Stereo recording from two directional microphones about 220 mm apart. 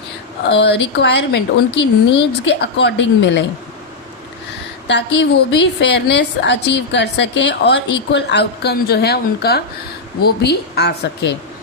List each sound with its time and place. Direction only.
0.4 s a woman's voice: 50° left (ahead or behind)
4.9 s a woman's voice: 50° left (ahead or behind)